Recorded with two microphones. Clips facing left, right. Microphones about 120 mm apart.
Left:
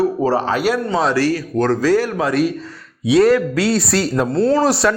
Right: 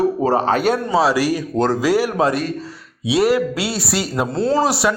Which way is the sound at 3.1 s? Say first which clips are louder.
Left 3 dB; 10° right (ahead or behind).